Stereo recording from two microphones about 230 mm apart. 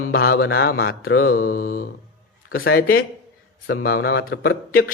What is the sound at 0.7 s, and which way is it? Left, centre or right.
Speech, left.